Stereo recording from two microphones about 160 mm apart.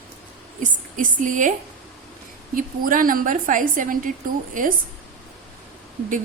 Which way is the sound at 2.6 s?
60° right (ahead or behind).